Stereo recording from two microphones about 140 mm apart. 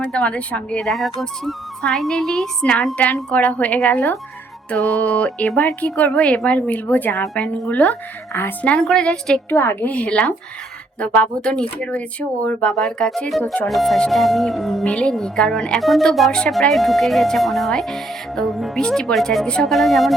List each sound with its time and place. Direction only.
0.0 s a woman's voice: 10° left (ahead or behind)
3.9 s a woman's voice: 20° left (ahead or behind)
13.7 s a woman's voice: centre (ahead or behind)